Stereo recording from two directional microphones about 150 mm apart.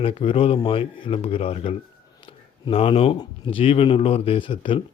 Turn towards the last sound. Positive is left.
turn(degrees=35)  # may be behind; listen again after turning